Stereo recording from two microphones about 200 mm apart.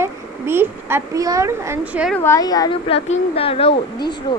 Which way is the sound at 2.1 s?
15° left (ahead or behind).